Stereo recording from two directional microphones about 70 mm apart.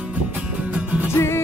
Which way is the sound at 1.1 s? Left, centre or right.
Left.